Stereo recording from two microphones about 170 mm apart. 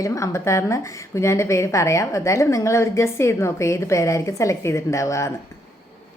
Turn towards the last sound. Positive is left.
turn(degrees=15)  # may be behind; listen again after turning